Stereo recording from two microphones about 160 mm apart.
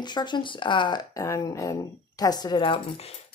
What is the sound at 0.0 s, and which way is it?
Speech, 30° left (ahead or behind).